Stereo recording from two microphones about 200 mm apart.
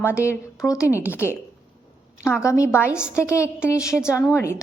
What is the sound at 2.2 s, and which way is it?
Speech, 15° left (ahead or behind).